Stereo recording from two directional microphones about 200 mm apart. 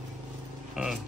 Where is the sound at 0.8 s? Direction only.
5° right (ahead or behind).